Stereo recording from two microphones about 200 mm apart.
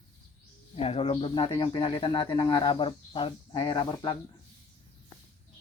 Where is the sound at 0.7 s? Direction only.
30° left (ahead or behind).